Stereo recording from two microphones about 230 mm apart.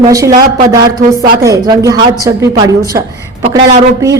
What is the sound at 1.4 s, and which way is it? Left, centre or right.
A man's voice, centre.